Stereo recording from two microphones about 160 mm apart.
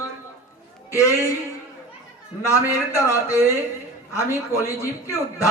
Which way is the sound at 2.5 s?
20° left (ahead or behind).